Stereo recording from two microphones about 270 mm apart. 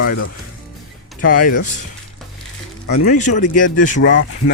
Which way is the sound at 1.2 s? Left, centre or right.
Left.